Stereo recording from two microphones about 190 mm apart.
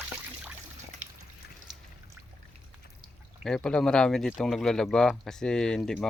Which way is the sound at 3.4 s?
5° left (ahead or behind).